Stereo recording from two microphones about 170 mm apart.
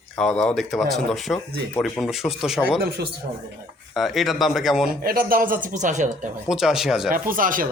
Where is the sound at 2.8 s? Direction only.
65° right (ahead or behind).